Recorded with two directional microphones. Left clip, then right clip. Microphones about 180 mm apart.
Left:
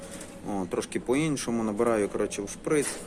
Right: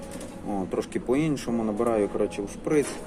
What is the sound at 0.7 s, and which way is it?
Speech, 30° left (ahead or behind).